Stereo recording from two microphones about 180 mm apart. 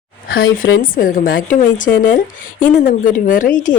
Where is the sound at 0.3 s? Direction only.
55° left (ahead or behind).